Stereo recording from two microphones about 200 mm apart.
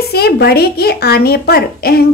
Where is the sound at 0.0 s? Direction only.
50° left (ahead or behind).